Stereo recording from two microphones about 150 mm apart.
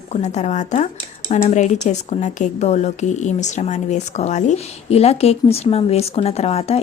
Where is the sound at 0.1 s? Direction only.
50° left (ahead or behind).